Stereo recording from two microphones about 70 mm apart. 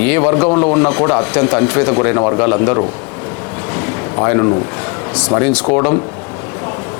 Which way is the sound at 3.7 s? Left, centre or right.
Left.